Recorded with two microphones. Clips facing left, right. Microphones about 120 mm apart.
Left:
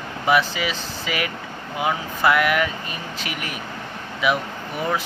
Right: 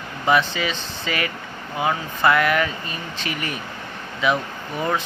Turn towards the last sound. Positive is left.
turn(degrees=5)  # may be behind; listen again after turning